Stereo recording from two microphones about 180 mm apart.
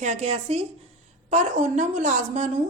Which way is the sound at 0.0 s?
40° right (ahead or behind).